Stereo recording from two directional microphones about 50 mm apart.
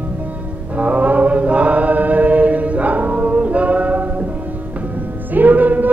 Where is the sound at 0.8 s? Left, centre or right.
Right.